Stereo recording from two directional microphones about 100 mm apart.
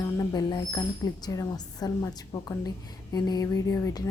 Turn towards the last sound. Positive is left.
turn(degrees=35)  # may be behind; listen again after turning